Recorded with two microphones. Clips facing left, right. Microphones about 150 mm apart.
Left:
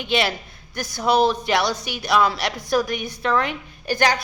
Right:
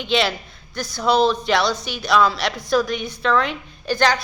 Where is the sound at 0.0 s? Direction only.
10° left (ahead or behind).